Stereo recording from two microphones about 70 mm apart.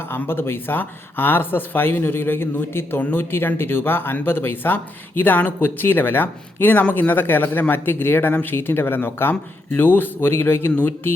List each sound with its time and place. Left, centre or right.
0.1 s speech: left